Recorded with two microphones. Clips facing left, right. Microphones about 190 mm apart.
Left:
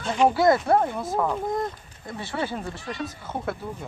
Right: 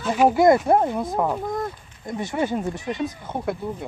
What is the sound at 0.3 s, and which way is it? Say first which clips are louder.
Speech: right 3 dB; 20° right (ahead or behind).